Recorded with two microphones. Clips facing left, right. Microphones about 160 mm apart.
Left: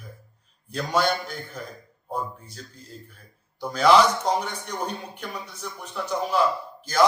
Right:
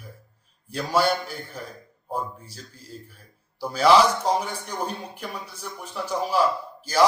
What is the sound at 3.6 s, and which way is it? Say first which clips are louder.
Speech: even; 5° right (ahead or behind).